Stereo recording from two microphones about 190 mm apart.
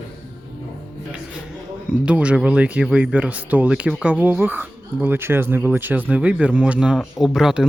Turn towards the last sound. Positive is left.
turn(degrees=-5)  # may be behind; listen again after turning